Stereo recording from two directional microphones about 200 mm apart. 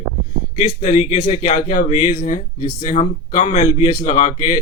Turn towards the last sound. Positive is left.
turn(degrees=30)  # may be behind; listen again after turning